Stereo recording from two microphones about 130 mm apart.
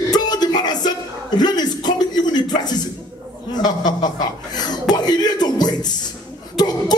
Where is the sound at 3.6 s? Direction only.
30° left (ahead or behind).